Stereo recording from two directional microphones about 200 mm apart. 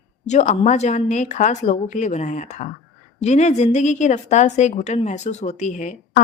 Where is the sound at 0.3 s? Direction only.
35° left (ahead or behind).